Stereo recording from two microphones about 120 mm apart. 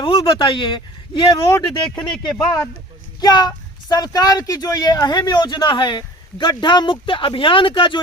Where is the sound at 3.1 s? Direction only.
35° left (ahead or behind).